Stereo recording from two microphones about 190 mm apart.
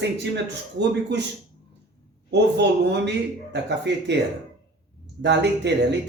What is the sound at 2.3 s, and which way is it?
Speech, 65° right (ahead or behind).